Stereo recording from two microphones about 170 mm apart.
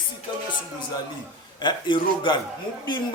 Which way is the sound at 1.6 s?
25° left (ahead or behind).